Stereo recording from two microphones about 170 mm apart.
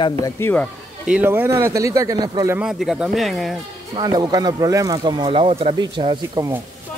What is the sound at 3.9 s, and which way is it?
Speech, 25° right (ahead or behind).